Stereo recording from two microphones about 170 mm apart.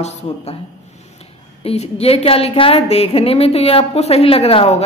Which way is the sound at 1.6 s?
35° left (ahead or behind).